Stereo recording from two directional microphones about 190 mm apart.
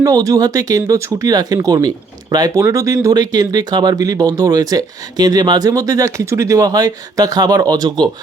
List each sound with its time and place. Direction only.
0.0 s speech: 20° right (ahead or behind)